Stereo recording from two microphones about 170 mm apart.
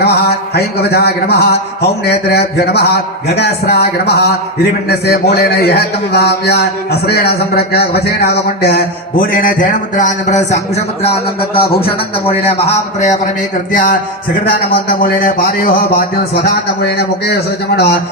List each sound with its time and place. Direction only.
0.0 s a sound: 70° left (ahead or behind)
2.0 s a man's voice: 70° left (ahead or behind); by 10.6 s 45° left (ahead or behind)
12.2 s a man's voice: 35° left (ahead or behind)
14.8 s a man's voice: 60° left (ahead or behind)
16.3 s a man's voice: 70° left (ahead or behind)